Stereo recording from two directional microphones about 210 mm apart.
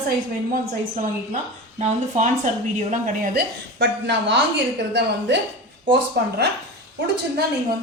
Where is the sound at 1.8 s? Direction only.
35° right (ahead or behind); by 4.3 s 55° right (ahead or behind).